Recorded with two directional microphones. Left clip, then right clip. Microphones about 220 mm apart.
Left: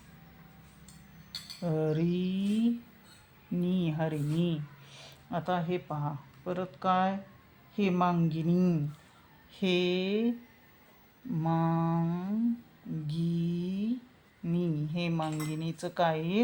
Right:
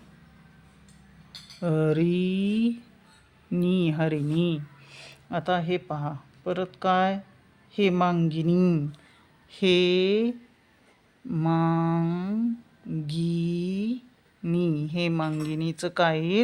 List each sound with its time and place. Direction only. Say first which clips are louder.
1.6 s speech: right 7 dB; 40° right (ahead or behind)